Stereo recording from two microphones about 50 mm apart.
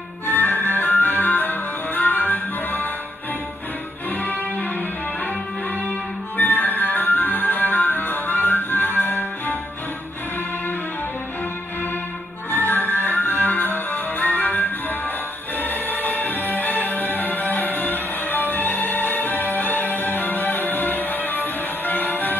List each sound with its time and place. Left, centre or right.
0.3 s music: left
4.2 s music: left
5.9 s music: left
12.4 s music: left